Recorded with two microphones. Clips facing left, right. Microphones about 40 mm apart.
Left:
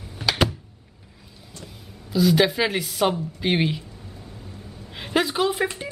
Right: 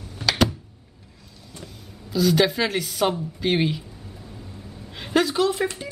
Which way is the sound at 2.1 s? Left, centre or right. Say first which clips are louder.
Left 1 dB; centre.